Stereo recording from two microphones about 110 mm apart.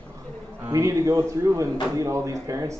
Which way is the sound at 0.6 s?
30° right (ahead or behind).